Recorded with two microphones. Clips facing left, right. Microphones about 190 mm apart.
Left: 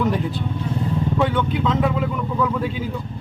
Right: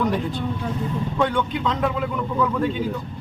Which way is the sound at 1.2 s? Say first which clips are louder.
Right 1 dB; 5° left (ahead or behind).